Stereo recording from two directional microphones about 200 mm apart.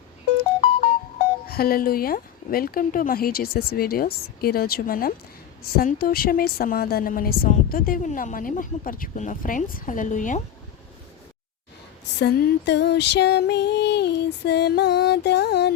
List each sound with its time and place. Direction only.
1.5 s a woman's voice: 50° left (ahead or behind)
12.2 s female singing: 60° left (ahead or behind)